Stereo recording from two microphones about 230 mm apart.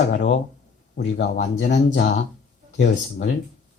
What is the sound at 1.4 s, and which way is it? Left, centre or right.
Speech, left.